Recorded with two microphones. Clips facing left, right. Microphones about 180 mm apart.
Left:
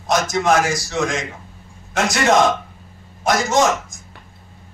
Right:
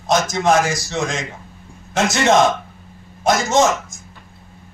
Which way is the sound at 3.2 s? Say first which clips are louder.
Right 1 dB; 25° right (ahead or behind).